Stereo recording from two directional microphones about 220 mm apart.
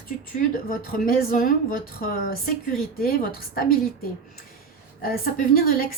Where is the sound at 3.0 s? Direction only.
40° left (ahead or behind).